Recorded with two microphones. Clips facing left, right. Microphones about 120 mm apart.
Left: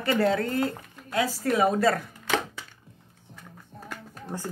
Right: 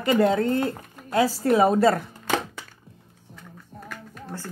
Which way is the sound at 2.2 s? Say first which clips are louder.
Right 1 dB; 50° right (ahead or behind).